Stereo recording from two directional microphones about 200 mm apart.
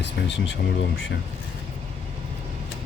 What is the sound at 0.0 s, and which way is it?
Speech, 60° left (ahead or behind).